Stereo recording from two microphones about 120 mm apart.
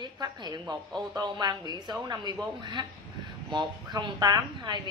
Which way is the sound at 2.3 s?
Centre (ahead or behind).